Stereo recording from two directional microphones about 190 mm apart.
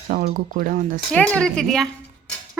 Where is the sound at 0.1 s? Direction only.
45° right (ahead or behind).